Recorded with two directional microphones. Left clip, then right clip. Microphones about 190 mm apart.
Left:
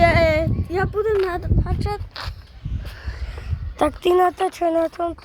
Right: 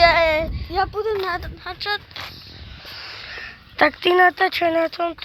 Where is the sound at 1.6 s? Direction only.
10° left (ahead or behind).